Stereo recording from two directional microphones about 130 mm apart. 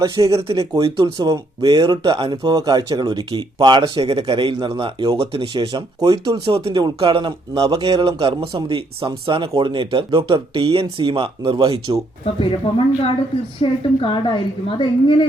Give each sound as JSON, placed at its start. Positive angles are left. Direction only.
{"t": 0.0, "sound": "speech", "side_deg": -25}
{"t": 12.2, "sound": "speech", "side_deg": 45}
{"t": 13.6, "sound": "a woman's voice", "side_deg": 40}